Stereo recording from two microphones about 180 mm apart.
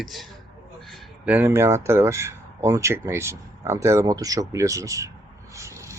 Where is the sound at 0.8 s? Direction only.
Centre (ahead or behind).